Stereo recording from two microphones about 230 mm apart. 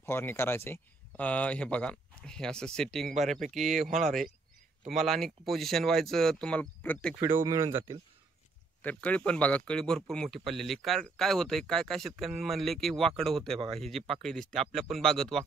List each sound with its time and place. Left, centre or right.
0.0 s speech: centre
3.6 s speech: right
4.0 s speech: centre
7.2 s speech: centre
8.8 s speech: centre